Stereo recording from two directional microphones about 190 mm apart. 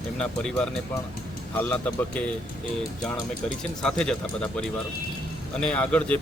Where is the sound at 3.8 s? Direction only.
5° left (ahead or behind).